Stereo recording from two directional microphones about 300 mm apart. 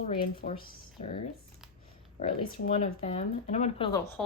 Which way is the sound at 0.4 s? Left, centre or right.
Left.